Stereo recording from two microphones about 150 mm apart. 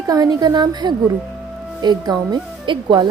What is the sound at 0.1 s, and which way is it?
Speech, 25° right (ahead or behind).